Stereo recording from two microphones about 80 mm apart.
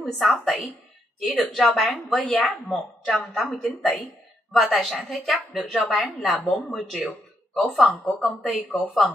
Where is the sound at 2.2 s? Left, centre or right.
Centre.